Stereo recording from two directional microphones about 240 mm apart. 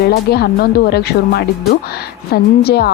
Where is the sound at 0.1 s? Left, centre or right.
Left.